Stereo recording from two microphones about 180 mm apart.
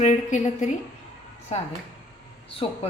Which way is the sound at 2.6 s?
35° left (ahead or behind).